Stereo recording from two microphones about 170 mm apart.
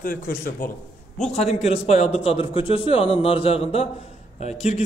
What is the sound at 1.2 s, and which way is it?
A man's voice, 40° left (ahead or behind).